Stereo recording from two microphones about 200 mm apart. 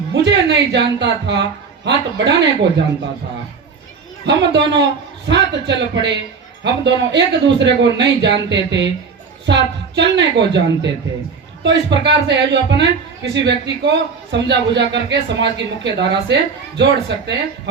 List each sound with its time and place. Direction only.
0.1 s a man's voice: 60° right (ahead or behind)
4.3 s a man's voice: 60° right (ahead or behind)